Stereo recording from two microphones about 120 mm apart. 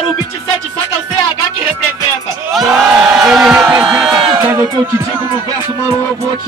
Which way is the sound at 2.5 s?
Centre (ahead or behind).